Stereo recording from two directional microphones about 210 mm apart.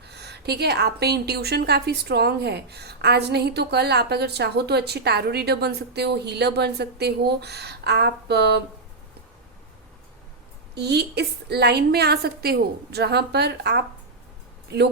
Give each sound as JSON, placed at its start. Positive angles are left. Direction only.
{"t": 0.0, "sound": "a woman's voice", "side_deg": -50}
{"t": 10.8, "sound": "a woman's voice", "side_deg": -50}